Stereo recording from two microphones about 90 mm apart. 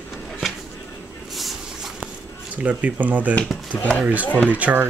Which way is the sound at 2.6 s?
15° right (ahead or behind).